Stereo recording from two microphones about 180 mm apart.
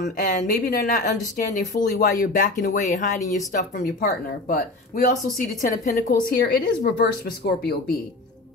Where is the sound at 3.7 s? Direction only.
55° left (ahead or behind).